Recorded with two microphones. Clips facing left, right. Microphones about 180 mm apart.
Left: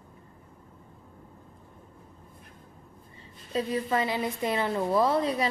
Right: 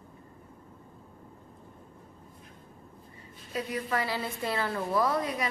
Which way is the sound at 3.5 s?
25° left (ahead or behind).